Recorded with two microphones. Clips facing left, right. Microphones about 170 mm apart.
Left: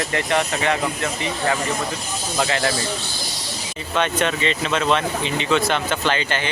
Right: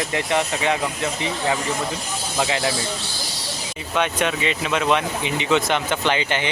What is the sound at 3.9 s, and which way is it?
Speech, 10° right (ahead or behind).